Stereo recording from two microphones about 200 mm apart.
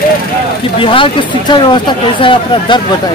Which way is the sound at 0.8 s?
25° left (ahead or behind).